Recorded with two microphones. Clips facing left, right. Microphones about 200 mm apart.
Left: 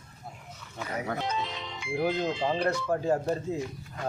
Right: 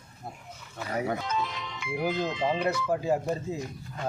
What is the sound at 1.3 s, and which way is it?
Speech, 30° left (ahead or behind).